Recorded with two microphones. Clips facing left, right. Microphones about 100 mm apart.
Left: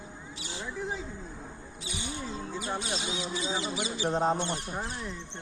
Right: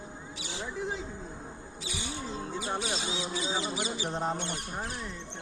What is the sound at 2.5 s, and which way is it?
Mouse, 20° right (ahead or behind).